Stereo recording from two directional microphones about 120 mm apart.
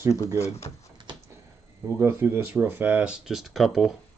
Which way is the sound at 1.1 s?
40° right (ahead or behind).